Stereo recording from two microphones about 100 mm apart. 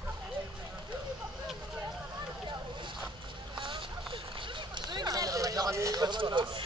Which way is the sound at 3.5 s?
55° right (ahead or behind).